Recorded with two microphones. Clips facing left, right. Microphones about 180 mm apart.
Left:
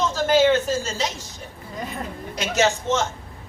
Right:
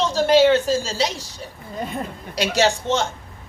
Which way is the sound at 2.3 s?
35° right (ahead or behind).